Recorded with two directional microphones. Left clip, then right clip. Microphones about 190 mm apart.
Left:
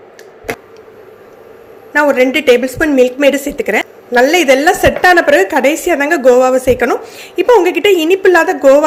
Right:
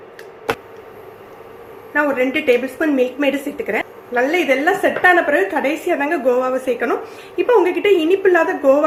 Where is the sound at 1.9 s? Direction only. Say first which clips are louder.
Left 7 dB; 40° left (ahead or behind).